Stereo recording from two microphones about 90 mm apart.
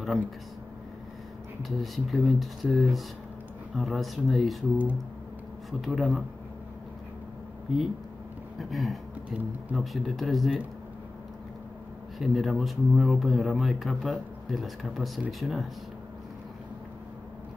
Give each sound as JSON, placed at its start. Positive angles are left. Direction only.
{"t": 1.6, "sound": "speech", "side_deg": 0}
{"t": 5.7, "sound": "speech", "side_deg": 0}
{"t": 7.7, "sound": "speech", "side_deg": 0}
{"t": 9.3, "sound": "speech", "side_deg": -15}
{"t": 9.8, "sound": "speech", "side_deg": 0}
{"t": 12.2, "sound": "speech", "side_deg": 0}